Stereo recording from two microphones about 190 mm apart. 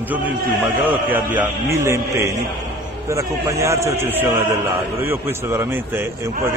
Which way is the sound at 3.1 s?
15° right (ahead or behind).